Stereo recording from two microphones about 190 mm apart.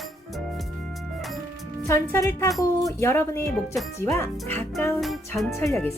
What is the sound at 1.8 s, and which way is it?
Speech, 15° left (ahead or behind).